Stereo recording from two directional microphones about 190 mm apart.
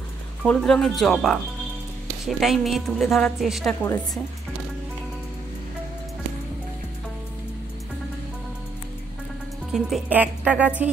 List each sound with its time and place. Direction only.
0.4 s a woman's voice: 5° left (ahead or behind)
9.7 s speech: 5° right (ahead or behind)